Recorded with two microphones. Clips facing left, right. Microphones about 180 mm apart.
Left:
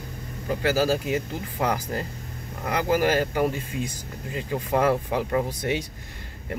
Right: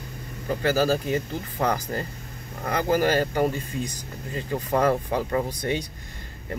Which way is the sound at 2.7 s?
40° right (ahead or behind).